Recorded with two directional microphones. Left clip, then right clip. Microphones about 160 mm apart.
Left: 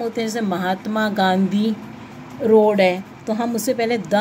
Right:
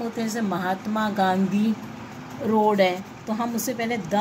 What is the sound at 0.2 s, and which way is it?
A woman's voice, 40° left (ahead or behind).